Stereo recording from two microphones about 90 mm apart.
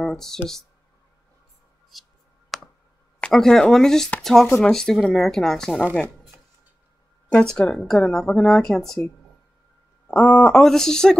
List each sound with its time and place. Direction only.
0.0 s speech: 5° left (ahead or behind)
1.9 s speech: centre (ahead or behind)
2.5 s clicking: centre (ahead or behind)
3.2 s speech: 10° left (ahead or behind)
7.2 s speech: 15° left (ahead or behind)
10.0 s speech: 15° left (ahead or behind)
10.4 s speech: 5° left (ahead or behind)